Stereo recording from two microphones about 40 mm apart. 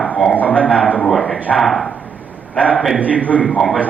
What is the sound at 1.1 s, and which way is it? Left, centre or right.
Speech, centre.